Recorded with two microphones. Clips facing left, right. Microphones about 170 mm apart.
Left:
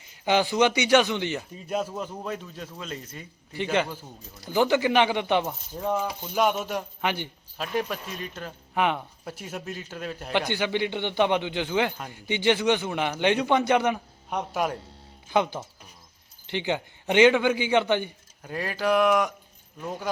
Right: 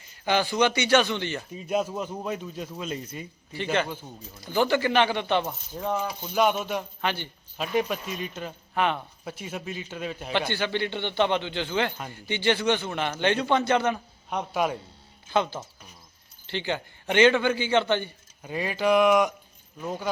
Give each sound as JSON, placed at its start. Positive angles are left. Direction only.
{"t": 0.3, "sound": "speech", "side_deg": 15}
{"t": 1.6, "sound": "a man's voice", "side_deg": -10}
{"t": 3.5, "sound": "speech", "side_deg": 15}
{"t": 3.8, "sound": "speech", "side_deg": 5}
{"t": 4.4, "sound": "speech", "side_deg": 15}
{"t": 7.0, "sound": "speech", "side_deg": 15}
{"t": 7.6, "sound": "speech", "side_deg": -5}
{"t": 8.7, "sound": "speech", "side_deg": 15}
{"t": 9.2, "sound": "speech", "side_deg": 0}
{"t": 10.5, "sound": "speech", "side_deg": 15}
{"t": 14.3, "sound": "speech", "side_deg": 0}
{"t": 15.3, "sound": "speech", "side_deg": 15}
{"t": 18.4, "sound": "speech", "side_deg": -5}